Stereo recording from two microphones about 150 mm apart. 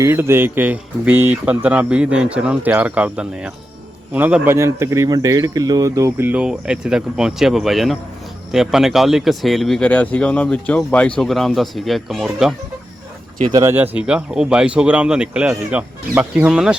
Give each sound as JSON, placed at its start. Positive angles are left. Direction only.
{"t": 0.0, "sound": "speech", "side_deg": -15}
{"t": 13.5, "sound": "speech", "side_deg": -25}
{"t": 13.7, "sound": "speech", "side_deg": -10}